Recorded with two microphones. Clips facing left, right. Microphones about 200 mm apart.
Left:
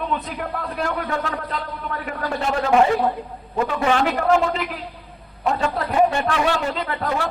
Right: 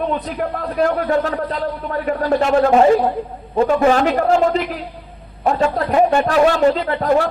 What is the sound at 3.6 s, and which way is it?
Speech, 40° right (ahead or behind).